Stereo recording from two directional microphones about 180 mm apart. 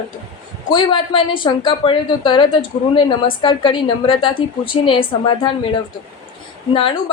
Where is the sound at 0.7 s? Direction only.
25° left (ahead or behind).